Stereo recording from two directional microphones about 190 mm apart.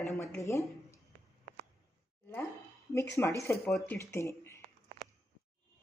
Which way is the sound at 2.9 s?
15° left (ahead or behind).